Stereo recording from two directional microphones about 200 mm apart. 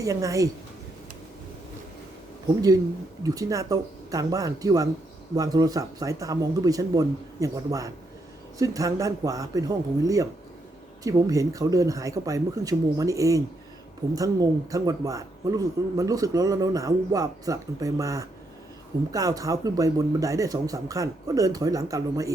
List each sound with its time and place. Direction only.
0.0 s a man's voice: 15° right (ahead or behind)
3.2 s a man's voice: 15° right (ahead or behind)